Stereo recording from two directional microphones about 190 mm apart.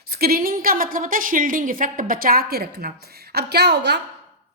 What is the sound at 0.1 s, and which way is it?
A woman's voice, 50° right (ahead or behind).